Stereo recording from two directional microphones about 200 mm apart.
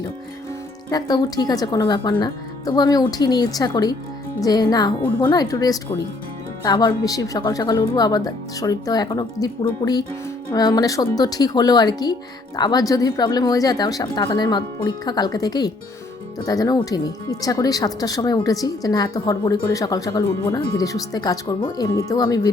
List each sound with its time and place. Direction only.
0.9 s speech: 20° left (ahead or behind)